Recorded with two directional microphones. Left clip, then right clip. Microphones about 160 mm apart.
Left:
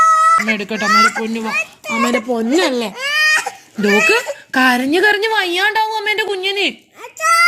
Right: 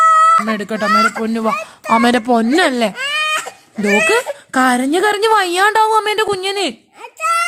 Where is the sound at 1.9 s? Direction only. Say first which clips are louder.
Right 5 dB; 85° right.